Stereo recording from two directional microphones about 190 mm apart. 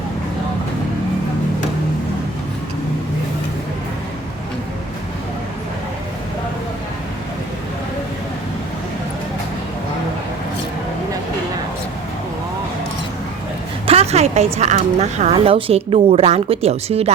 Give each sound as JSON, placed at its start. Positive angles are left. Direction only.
{"t": 13.8, "sound": "a woman's voice", "side_deg": -30}